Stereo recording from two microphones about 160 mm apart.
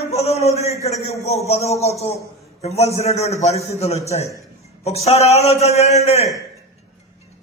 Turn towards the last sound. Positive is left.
turn(degrees=40)  # may be behind; listen again after turning